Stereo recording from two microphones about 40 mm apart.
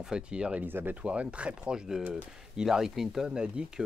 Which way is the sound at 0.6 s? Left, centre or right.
Right.